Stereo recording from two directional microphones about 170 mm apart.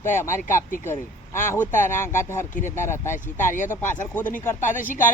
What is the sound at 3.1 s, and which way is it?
Speech, 50° left (ahead or behind).